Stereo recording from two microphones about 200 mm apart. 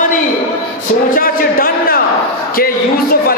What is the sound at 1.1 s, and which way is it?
A man's voice, 45° left (ahead or behind).